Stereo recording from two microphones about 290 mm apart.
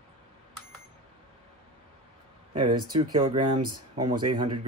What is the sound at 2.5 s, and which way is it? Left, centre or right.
Speech, centre.